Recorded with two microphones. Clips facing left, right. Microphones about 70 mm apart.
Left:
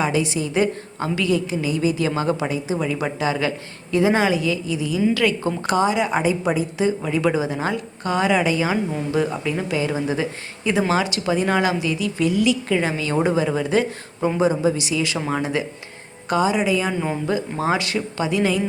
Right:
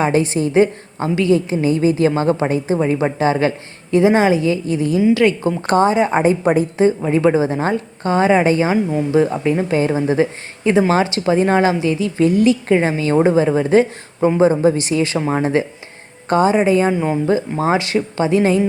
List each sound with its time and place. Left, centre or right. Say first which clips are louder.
0.0 s a woman's voice: right 5 dB; right
0.5 s a woman's voice: right 7 dB; right
4.6 s a woman's voice: right 6 dB; right
5.1 s speech: right 6 dB; right
5.6 s a woman's voice: right 6 dB; right
7.1 s a woman's voice: right 6 dB; right
8.6 s a woman's voice: right 5 dB; centre
9.2 s a woman's voice: right 6 dB; right